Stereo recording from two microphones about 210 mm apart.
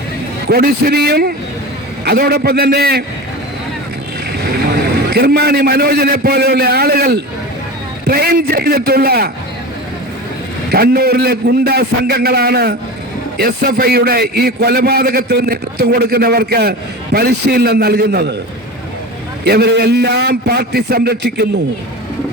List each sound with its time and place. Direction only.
0.4 s a man's voice: 45° right (ahead or behind)
5.0 s a man's voice: 50° right (ahead or behind)
10.7 s a man's voice: 45° right (ahead or behind)
19.5 s a man's voice: 50° right (ahead or behind)